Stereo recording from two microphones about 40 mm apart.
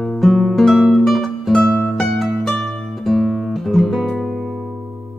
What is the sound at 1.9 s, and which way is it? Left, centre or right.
Music, centre.